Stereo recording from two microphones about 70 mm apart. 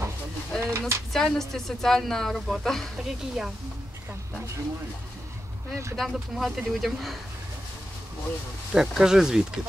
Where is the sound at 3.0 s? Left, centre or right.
Centre.